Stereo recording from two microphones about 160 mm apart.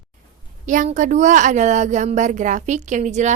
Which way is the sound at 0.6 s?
55° right (ahead or behind).